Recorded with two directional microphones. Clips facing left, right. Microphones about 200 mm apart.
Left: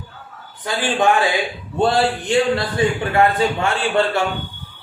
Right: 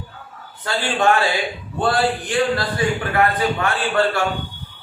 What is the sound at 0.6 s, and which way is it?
A man's voice, 15° left (ahead or behind).